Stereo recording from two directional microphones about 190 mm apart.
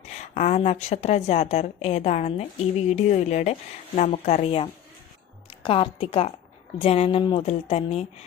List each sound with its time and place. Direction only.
0.1 s a woman's voice: 35° left (ahead or behind)